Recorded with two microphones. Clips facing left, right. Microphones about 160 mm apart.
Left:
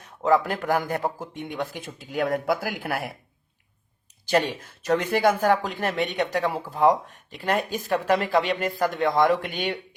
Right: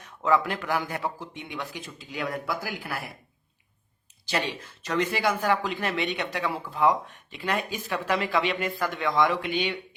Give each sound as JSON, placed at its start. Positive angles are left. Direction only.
{"t": 0.0, "sound": "a man's voice", "side_deg": 35}
{"t": 4.3, "sound": "a man's voice", "side_deg": 50}